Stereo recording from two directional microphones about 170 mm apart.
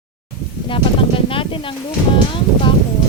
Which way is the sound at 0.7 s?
30° left (ahead or behind).